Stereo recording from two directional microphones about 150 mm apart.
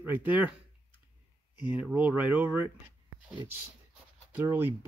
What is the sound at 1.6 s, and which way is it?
Speech, 10° right (ahead or behind).